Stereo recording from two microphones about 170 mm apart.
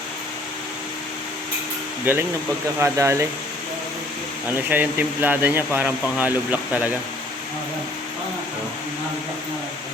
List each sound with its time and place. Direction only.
2.1 s speech: 10° right (ahead or behind)
4.4 s speech: 10° right (ahead or behind)